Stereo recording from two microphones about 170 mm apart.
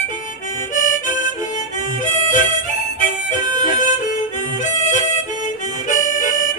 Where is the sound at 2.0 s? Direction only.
50° left (ahead or behind).